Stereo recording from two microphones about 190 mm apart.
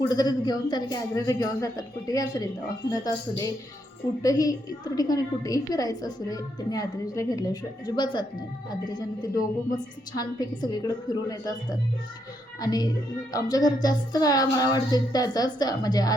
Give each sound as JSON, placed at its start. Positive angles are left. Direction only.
{"t": 0.1, "sound": "a woman's voice", "side_deg": 20}